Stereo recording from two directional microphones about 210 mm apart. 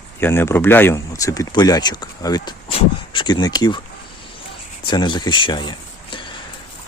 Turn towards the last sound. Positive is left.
turn(degrees=20)  # may be behind; listen again after turning